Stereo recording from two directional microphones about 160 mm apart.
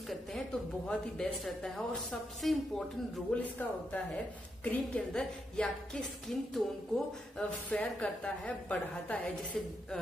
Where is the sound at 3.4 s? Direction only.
10° left (ahead or behind).